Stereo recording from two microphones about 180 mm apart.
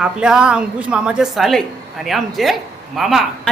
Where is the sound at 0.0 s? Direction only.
5° right (ahead or behind).